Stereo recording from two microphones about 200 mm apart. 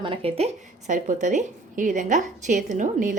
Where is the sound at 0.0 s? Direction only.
30° right (ahead or behind).